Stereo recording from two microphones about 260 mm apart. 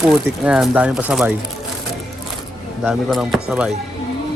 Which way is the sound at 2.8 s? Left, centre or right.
Centre.